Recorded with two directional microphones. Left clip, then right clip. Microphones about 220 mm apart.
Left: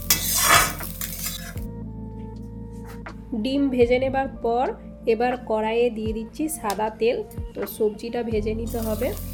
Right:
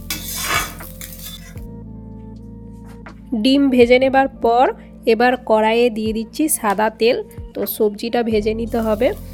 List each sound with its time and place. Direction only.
3.3 s a woman's voice: 45° right (ahead or behind)